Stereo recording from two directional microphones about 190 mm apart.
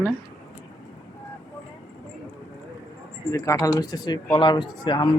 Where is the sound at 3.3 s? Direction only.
15° left (ahead or behind).